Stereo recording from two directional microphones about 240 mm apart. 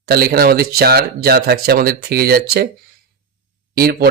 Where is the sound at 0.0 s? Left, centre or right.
Right.